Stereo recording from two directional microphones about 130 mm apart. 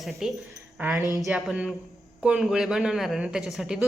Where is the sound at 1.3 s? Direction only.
5° right (ahead or behind).